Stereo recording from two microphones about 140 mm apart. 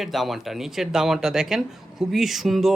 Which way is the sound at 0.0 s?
Centre (ahead or behind).